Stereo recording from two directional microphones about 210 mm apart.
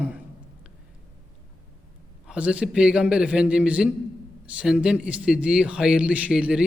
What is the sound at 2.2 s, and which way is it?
A man's voice, 5° right (ahead or behind).